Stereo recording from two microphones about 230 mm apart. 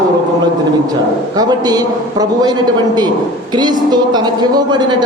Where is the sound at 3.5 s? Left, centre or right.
Centre.